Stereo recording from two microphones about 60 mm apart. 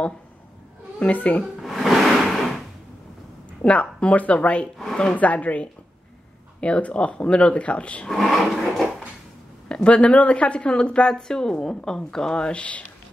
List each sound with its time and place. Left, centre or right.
0.9 s speech: left
1.4 s music: centre
3.6 s speech: centre
4.7 s speech: centre
5.1 s speech: left
8.1 s a sound: centre
9.7 s speech: centre